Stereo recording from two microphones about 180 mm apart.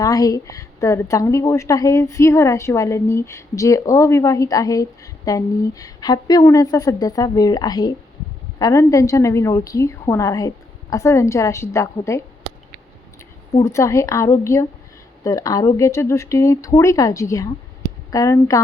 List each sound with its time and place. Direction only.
0.0 s a woman's voice: 20° left (ahead or behind)
13.6 s a woman's voice: 15° left (ahead or behind)